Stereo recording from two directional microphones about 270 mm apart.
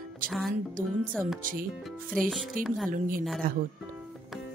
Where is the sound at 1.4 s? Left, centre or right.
Right.